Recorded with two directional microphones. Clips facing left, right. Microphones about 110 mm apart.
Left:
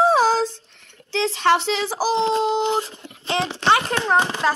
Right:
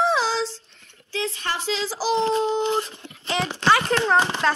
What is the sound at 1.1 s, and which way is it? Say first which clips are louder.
Speech: left 9 dB; 90° left.